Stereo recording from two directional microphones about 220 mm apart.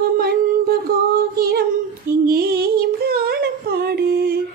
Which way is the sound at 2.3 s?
45° right (ahead or behind).